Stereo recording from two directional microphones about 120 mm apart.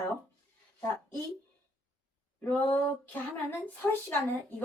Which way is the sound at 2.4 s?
15° left (ahead or behind).